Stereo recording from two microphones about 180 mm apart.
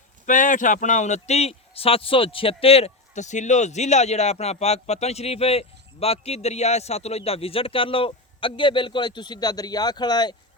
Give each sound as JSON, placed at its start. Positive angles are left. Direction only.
{"t": 0.3, "sound": "a man's voice", "side_deg": 45}